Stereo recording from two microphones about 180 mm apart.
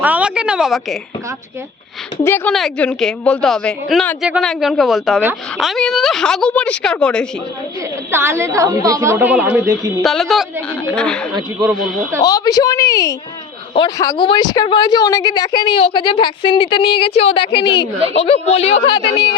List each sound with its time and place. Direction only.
0.0 s a woman's voice: 5° right (ahead or behind)
2.2 s a woman's voice: 10° left (ahead or behind)
8.1 s a woman's voice: 15° right (ahead or behind); by 11.2 s 5° left (ahead or behind)
12.2 s a woman's voice: 20° left (ahead or behind); by 18.8 s 35° left (ahead or behind)